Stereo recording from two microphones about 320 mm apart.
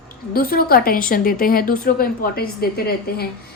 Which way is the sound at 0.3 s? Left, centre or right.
Left.